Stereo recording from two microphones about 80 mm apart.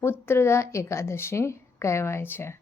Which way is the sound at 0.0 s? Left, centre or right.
Left.